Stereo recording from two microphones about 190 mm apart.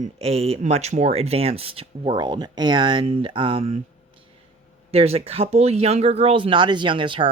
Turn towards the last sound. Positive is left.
turn(degrees=-25)  # may be behind; listen again after turning